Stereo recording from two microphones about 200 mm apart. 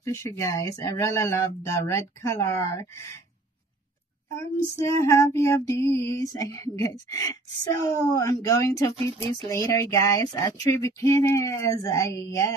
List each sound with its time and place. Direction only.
0.0 s speech: 15° left (ahead or behind)
4.8 s speech: 15° left (ahead or behind)